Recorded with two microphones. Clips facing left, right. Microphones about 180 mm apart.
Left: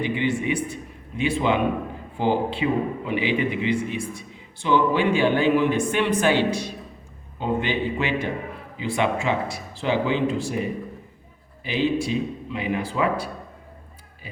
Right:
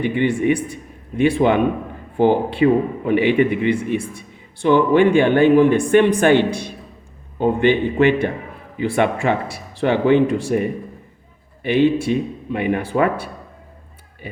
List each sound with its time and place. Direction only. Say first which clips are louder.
0.0 s a man's voice: right 6 dB; 55° right (ahead or behind)